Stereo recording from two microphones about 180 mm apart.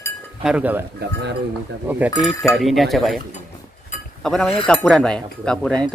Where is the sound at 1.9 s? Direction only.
10° right (ahead or behind).